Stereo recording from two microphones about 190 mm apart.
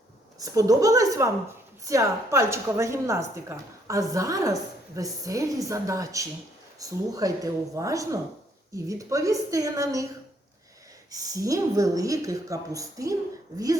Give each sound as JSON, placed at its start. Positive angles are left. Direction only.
{"t": 0.3, "sound": "a woman's voice", "side_deg": -20}
{"t": 11.1, "sound": "a woman's voice", "side_deg": -20}